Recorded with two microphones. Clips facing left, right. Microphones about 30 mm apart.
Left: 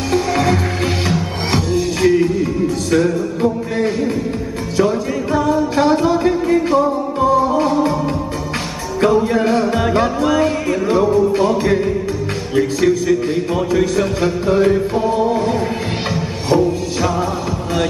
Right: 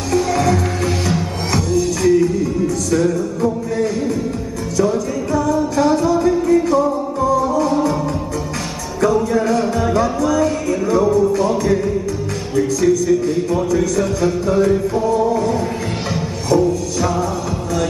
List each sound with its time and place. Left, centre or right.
0.1 s music: left
9.0 s music: left